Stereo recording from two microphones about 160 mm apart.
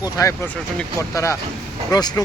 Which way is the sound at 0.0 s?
20° left (ahead or behind).